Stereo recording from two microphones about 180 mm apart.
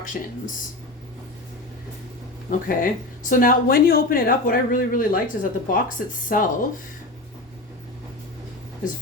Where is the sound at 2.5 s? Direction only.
50° left (ahead or behind).